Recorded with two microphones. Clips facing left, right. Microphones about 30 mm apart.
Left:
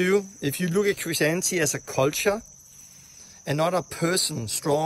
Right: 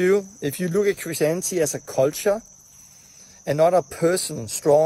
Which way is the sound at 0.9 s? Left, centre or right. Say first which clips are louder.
Right 2 dB; left.